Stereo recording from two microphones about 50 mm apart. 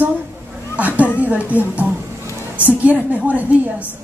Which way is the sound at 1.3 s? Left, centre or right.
Right.